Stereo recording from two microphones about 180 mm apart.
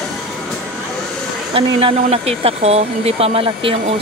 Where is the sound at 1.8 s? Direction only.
30° right (ahead or behind).